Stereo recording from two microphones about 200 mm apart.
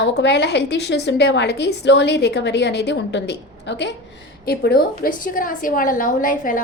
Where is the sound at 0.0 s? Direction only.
60° left (ahead or behind).